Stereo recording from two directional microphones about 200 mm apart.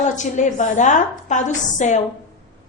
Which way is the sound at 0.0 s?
40° left (ahead or behind).